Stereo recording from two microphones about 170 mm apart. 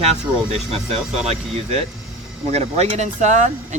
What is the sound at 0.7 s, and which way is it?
Speech, 35° right (ahead or behind).